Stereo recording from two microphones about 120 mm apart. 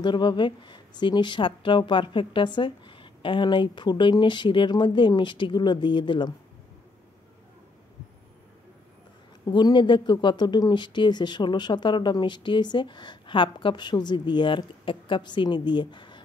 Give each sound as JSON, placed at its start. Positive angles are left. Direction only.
{"t": 0.0, "sound": "speech", "side_deg": 40}
{"t": 9.5, "sound": "speech", "side_deg": 40}